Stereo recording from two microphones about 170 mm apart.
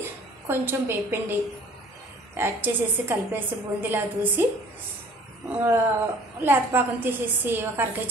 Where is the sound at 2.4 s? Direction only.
10° right (ahead or behind).